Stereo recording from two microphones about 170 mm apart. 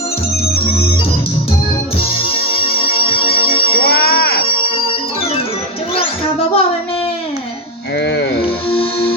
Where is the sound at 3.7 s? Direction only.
65° left (ahead or behind).